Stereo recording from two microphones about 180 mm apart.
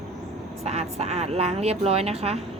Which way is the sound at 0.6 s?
35° right (ahead or behind).